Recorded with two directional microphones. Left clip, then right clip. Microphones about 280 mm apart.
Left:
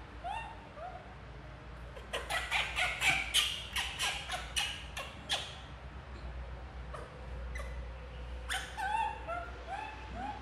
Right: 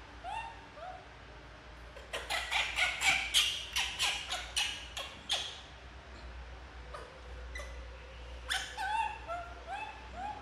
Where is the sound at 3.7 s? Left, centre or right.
Centre.